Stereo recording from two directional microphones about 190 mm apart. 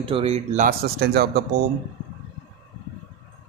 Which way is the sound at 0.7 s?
55° right (ahead or behind).